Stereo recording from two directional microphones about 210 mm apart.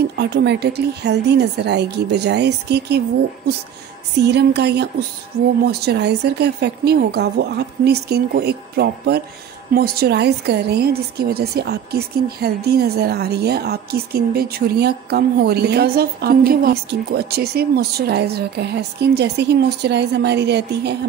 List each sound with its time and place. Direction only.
0.2 s a woman's voice: 55° right (ahead or behind)
4.2 s a woman's voice: 50° right (ahead or behind)